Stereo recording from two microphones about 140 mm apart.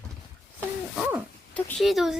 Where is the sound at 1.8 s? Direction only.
Centre (ahead or behind).